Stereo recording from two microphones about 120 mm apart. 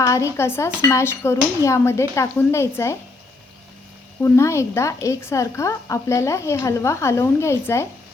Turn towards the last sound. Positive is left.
turn(degrees=20)  # may be behind; listen again after turning